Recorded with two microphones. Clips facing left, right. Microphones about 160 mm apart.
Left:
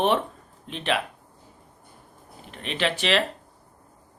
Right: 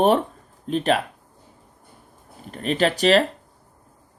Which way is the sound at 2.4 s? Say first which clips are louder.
Right 6 dB; 40° right (ahead or behind).